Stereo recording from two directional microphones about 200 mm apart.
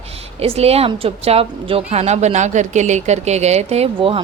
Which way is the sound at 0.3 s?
30° right (ahead or behind).